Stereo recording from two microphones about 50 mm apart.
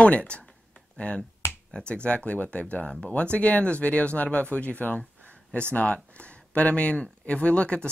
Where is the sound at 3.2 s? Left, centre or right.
Left.